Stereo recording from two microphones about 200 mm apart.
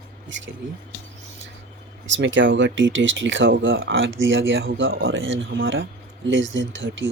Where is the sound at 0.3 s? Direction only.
65° right (ahead or behind).